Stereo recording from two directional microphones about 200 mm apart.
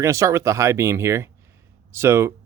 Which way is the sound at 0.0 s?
15° right (ahead or behind).